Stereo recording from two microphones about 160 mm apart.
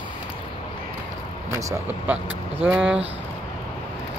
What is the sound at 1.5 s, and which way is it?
Speech, 20° right (ahead or behind).